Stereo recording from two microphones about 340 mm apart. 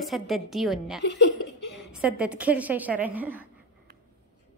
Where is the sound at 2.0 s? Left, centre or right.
Centre.